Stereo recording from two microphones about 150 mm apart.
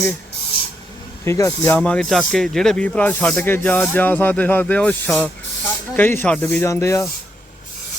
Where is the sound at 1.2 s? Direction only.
15° left (ahead or behind).